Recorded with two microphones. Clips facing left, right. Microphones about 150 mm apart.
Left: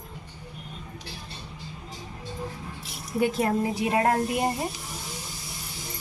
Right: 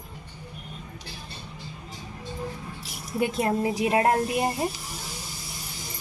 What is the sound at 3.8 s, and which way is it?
Speech, 20° right (ahead or behind).